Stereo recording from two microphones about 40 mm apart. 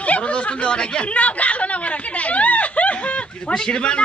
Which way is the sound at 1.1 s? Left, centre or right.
Left.